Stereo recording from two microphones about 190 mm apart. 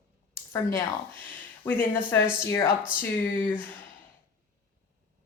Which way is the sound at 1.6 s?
10° left (ahead or behind).